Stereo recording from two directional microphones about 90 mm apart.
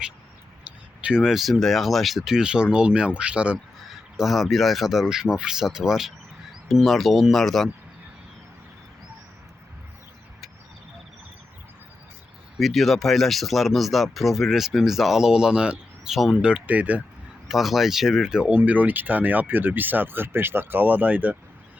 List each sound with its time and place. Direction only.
1.0 s speech: 5° right (ahead or behind)
3.8 s speech: centre (ahead or behind)
12.5 s speech: centre (ahead or behind); by 17.0 s 15° right (ahead or behind)
17.5 s speech: centre (ahead or behind)
18.5 s speech: 20° right (ahead or behind)